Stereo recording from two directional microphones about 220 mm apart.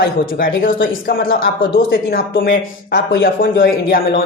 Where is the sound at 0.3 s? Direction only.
40° left (ahead or behind).